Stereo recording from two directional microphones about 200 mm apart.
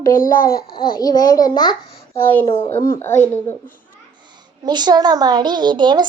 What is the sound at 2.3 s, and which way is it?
Speech, 10° left (ahead or behind).